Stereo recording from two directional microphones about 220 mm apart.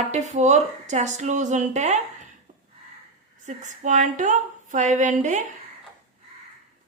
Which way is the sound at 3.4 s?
35° right (ahead or behind).